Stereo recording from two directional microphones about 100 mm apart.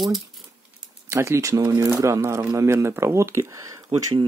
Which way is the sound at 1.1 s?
30° right (ahead or behind).